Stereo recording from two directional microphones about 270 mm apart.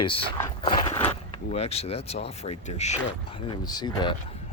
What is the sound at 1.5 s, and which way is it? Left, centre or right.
Speech, left.